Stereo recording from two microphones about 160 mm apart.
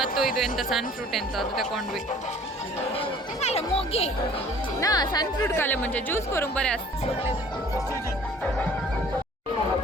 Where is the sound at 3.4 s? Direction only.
40° left (ahead or behind).